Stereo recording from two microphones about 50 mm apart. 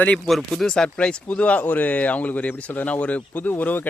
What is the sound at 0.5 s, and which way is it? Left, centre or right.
Speech, centre.